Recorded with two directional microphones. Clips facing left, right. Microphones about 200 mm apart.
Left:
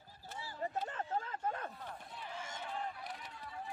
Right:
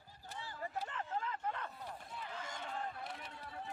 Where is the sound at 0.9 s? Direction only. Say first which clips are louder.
Left 2 dB; 40° left (ahead or behind).